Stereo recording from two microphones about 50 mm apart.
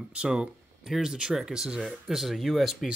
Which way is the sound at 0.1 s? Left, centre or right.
Right.